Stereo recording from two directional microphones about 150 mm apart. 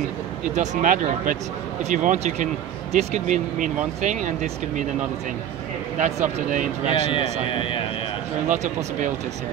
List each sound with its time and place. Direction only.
0.6 s speech: 55° right (ahead or behind)
5.9 s speech: 55° right (ahead or behind)
7.4 s a man's voice: 35° left (ahead or behind)
8.5 s speech: 55° right (ahead or behind)